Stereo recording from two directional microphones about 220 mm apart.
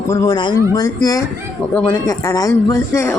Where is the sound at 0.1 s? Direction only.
20° left (ahead or behind).